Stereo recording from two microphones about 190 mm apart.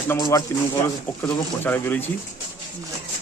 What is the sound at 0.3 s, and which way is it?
A man's voice, 15° left (ahead or behind).